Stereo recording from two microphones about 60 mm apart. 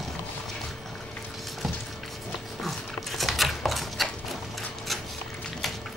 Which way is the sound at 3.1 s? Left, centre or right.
Centre.